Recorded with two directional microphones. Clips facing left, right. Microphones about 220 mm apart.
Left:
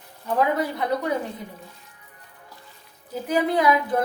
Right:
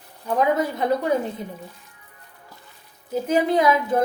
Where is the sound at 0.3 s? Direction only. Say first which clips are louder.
Right 2 dB; 20° right (ahead or behind).